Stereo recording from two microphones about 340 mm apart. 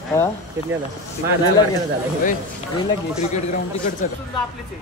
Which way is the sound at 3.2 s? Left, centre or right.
Centre.